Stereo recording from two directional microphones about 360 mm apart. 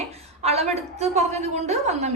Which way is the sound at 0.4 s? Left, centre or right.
Centre.